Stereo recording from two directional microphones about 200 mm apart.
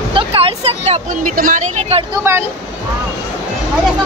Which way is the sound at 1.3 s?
40° right (ahead or behind).